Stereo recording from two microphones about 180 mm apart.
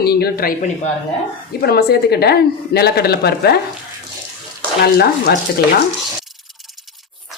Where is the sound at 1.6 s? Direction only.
60° left (ahead or behind).